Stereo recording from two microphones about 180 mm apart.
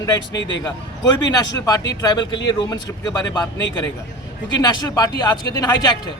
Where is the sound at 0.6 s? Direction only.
20° left (ahead or behind).